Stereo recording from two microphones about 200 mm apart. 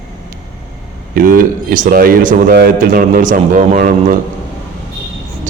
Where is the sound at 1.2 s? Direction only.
45° right (ahead or behind).